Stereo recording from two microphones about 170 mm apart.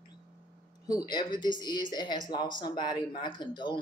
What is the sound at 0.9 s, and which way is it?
Speech, 25° left (ahead or behind).